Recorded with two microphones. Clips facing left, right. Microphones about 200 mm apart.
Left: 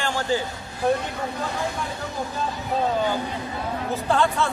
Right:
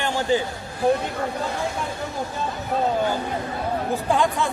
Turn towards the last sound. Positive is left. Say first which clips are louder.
# even
turn(degrees=-15)  # may be behind; listen again after turning